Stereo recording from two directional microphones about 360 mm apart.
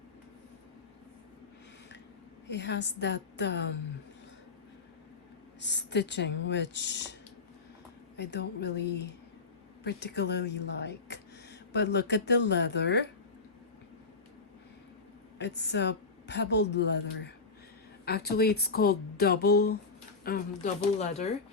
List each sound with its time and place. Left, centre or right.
2.5 s a woman's voice: left
5.5 s a woman's voice: left
15.4 s a woman's voice: left